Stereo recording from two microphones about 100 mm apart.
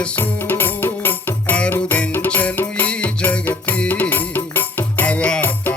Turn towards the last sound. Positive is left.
turn(degrees=15)  # may be behind; listen again after turning